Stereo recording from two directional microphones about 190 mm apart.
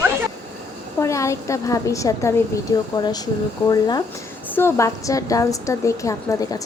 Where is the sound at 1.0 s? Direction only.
15° left (ahead or behind).